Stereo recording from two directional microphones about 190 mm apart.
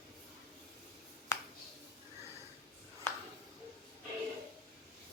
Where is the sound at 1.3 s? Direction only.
15° left (ahead or behind).